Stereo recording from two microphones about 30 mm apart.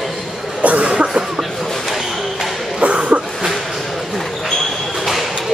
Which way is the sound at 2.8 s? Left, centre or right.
Right.